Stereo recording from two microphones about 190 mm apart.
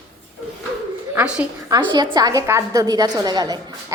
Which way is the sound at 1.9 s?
25° right (ahead or behind).